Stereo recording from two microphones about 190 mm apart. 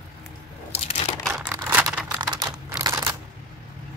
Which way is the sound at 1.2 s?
Centre (ahead or behind).